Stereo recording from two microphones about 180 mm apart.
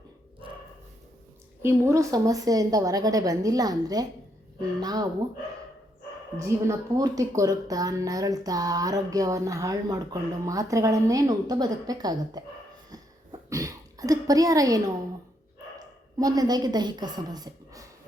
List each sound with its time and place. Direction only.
1.6 s a woman's voice: 15° right (ahead or behind)
6.4 s a woman's voice: 20° right (ahead or behind)
13.5 s a sound: 20° right (ahead or behind)
16.1 s a woman's voice: 20° right (ahead or behind)